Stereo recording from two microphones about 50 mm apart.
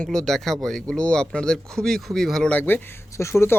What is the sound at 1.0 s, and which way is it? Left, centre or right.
Speech, centre.